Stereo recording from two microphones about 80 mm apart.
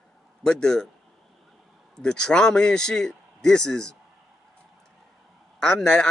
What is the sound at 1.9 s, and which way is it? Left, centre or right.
A man's voice, centre.